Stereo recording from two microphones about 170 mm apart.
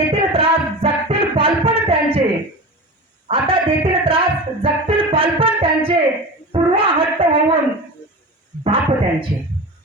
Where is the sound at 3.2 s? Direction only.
35° right (ahead or behind).